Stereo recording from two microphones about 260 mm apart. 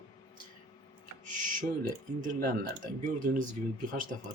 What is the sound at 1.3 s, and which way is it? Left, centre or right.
Speech, right.